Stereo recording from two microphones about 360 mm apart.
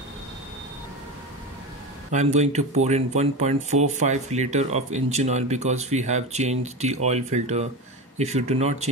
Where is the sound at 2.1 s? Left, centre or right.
Centre.